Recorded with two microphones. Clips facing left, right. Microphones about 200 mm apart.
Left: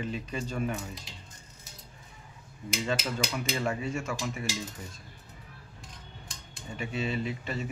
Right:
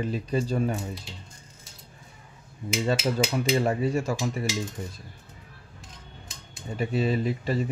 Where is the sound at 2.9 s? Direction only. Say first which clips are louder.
Right 7 dB; 35° right (ahead or behind).